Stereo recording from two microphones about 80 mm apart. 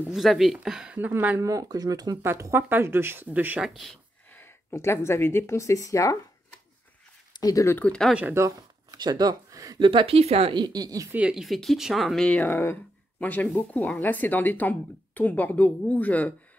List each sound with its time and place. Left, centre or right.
0.1 s speech: centre
0.9 s speech: right
1.4 s speech: right
2.2 s speech: right
3.6 s speech: centre
4.3 s speech: left
7.3 s speech: left
7.8 s speech: centre
8.3 s speech: right
8.9 s speech: right
9.8 s speech: right
10.5 s speech: right
11.3 s speech: centre
12.3 s a woman's voice: left